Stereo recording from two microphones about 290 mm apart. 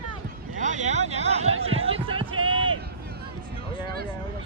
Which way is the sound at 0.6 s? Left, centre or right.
Right.